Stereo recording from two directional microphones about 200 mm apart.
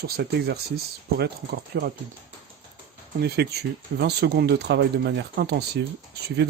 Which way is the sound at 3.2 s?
55° right (ahead or behind).